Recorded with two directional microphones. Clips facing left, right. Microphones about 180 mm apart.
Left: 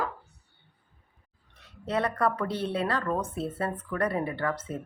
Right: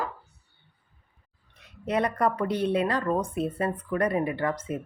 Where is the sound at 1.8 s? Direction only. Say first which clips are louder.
Right 2 dB; 15° right (ahead or behind).